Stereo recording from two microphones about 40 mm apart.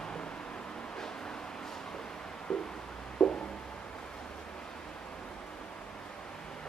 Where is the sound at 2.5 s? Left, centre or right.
Centre.